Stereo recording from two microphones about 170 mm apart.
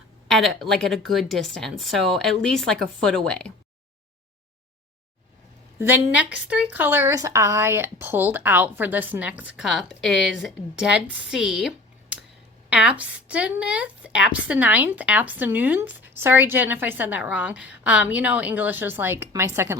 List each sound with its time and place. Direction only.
0.3 s speech: centre (ahead or behind)
5.9 s a woman's voice: 10° right (ahead or behind)